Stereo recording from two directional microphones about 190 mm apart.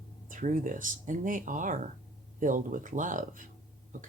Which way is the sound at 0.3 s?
45° right (ahead or behind).